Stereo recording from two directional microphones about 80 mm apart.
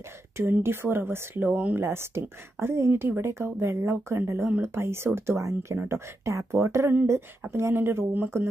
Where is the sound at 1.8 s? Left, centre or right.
Right.